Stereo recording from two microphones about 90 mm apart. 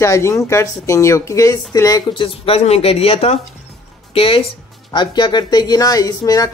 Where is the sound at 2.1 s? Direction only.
80° left.